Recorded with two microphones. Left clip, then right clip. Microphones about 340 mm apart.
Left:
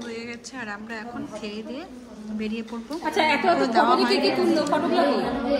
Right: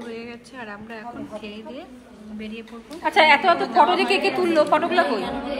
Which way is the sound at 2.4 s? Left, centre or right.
Centre.